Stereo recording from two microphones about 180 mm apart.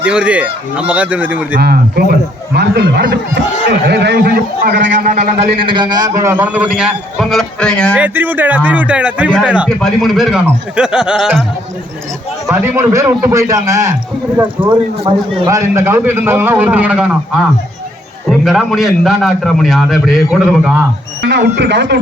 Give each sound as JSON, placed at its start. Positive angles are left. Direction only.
{"t": 0.0, "sound": "a man's voice", "side_deg": -5}
{"t": 1.5, "sound": "a man's voice", "side_deg": -60}
{"t": 5.5, "sound": "a man's voice", "side_deg": -25}
{"t": 7.9, "sound": "a man's voice", "side_deg": -10}
{"t": 12.5, "sound": "a man's voice", "side_deg": -15}
{"t": 14.6, "sound": "speech", "side_deg": -30}
{"t": 15.4, "sound": "a man's voice", "side_deg": -15}
{"t": 18.3, "sound": "a man's voice", "side_deg": 0}
{"t": 21.2, "sound": "speech", "side_deg": -70}